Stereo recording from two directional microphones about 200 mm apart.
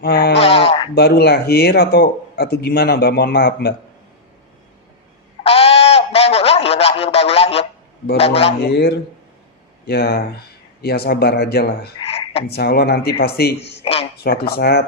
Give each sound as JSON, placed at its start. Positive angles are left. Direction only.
{"t": 0.0, "sound": "speech", "side_deg": 50}
{"t": 0.3, "sound": "sheep", "side_deg": 30}
{"t": 0.9, "sound": "speech", "side_deg": 50}
{"t": 5.4, "sound": "a sound", "side_deg": 30}
{"t": 8.2, "sound": "speech", "side_deg": 30}
{"t": 8.6, "sound": "speech", "side_deg": 55}
{"t": 11.9, "sound": "frog", "side_deg": 30}
{"t": 12.5, "sound": "speech", "side_deg": 50}
{"t": 13.8, "sound": "speech", "side_deg": 30}
{"t": 14.3, "sound": "speech", "side_deg": 50}